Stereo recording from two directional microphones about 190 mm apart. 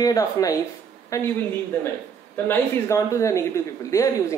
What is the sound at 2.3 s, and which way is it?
Speech, 10° left (ahead or behind).